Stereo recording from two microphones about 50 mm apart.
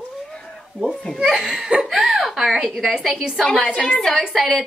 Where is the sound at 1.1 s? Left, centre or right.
Centre.